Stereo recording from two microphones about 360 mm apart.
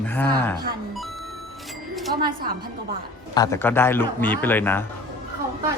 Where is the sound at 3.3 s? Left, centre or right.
Centre.